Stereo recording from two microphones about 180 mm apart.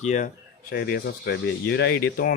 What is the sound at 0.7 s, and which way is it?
Speech, 60° left (ahead or behind).